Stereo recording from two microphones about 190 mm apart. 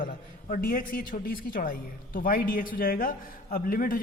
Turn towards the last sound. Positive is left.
turn(degrees=50)  # may be behind; listen again after turning